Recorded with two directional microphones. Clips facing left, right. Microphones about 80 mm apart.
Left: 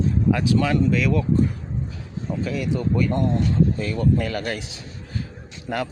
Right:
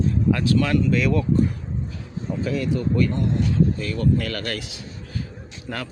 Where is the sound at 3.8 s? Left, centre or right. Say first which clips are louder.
Left 1 dB; left.